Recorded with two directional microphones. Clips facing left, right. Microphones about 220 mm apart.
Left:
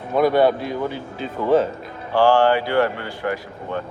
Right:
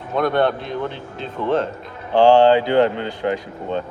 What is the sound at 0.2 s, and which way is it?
Speech, 5° left (ahead or behind).